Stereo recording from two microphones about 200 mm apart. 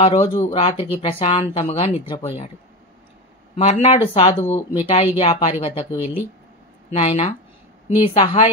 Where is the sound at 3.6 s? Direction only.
30° left (ahead or behind).